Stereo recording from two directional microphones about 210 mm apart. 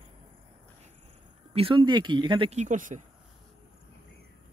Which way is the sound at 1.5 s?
25° right (ahead or behind).